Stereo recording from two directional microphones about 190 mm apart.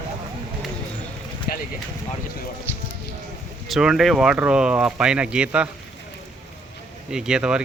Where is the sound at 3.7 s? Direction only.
Centre (ahead or behind).